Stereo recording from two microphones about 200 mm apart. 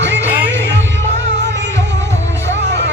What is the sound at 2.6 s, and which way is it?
Music, 60° right (ahead or behind).